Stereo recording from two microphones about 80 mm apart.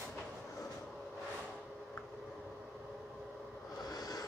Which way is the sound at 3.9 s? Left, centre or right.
Left.